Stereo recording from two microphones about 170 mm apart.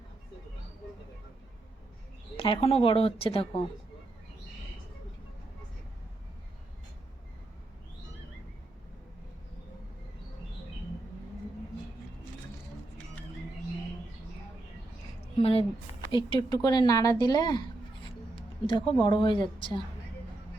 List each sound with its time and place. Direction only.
2.3 s speech: 35° left (ahead or behind)
15.4 s a woman's voice: 35° left (ahead or behind)
18.0 s music: 30° left (ahead or behind)
19.0 s a woman's voice: 30° left (ahead or behind)